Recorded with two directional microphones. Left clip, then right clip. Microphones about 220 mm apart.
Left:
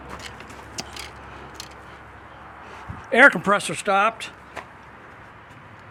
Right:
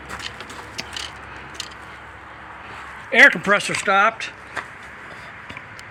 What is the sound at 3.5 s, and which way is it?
Speech, 5° left (ahead or behind).